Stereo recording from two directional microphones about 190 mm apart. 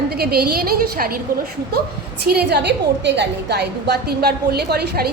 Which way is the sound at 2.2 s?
60° right (ahead or behind).